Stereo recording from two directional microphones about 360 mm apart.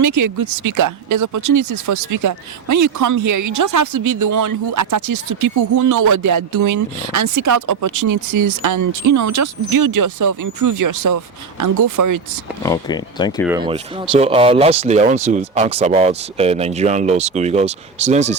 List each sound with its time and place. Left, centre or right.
0.0 s speech: right
12.6 s speech: centre
13.4 s speech: centre